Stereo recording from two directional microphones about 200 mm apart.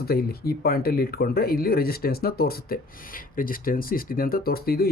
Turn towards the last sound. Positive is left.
turn(degrees=50)  # may be behind; listen again after turning